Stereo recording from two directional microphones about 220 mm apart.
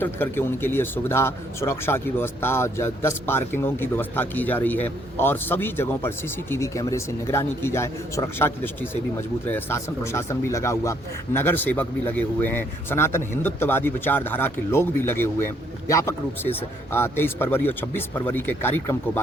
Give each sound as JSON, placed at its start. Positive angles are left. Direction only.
{"t": 0.0, "sound": "speech", "side_deg": 10}